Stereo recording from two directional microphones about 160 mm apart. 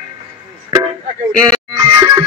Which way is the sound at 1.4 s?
25° right (ahead or behind).